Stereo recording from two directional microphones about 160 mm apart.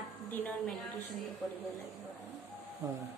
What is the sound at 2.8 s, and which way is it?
Speech, 20° right (ahead or behind).